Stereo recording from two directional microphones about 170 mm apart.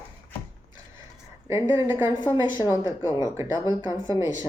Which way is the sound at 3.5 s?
25° left (ahead or behind).